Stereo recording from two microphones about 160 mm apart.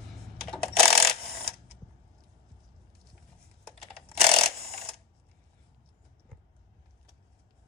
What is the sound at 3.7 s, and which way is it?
Typing, 5° left (ahead or behind).